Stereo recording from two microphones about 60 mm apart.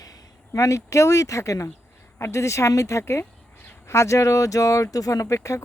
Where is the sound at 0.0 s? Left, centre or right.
Left.